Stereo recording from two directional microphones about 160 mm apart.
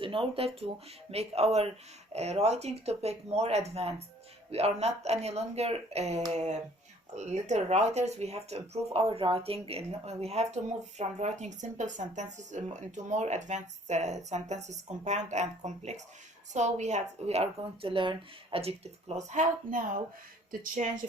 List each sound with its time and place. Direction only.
0.0 s speech: 35° right (ahead or behind); by 20.9 s 55° right (ahead or behind)